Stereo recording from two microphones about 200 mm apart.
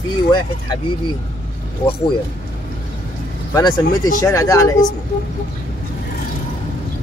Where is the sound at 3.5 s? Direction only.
20° left (ahead or behind).